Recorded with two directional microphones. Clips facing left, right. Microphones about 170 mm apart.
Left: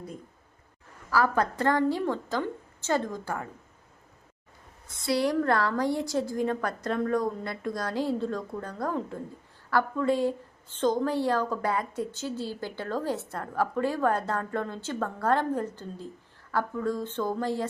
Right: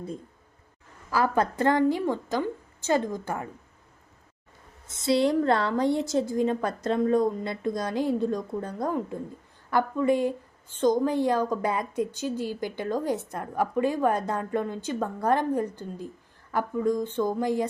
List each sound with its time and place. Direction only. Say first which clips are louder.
1.1 s a woman's voice: right 1 dB; 20° right (ahead or behind)
4.9 s a woman's voice: right 4 dB; 25° right (ahead or behind)